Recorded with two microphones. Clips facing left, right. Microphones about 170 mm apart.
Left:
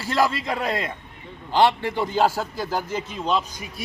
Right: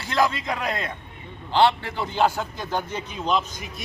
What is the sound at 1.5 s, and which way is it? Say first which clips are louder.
A man's voice: left 1 dB; 10° left (ahead or behind).